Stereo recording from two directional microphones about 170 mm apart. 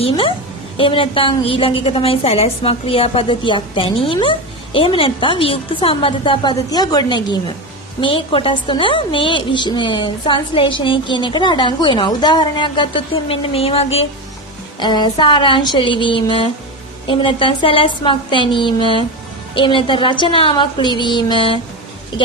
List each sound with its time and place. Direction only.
0.0 s a woman's voice: 35° left (ahead or behind)
14.8 s a woman's voice: 25° left (ahead or behind)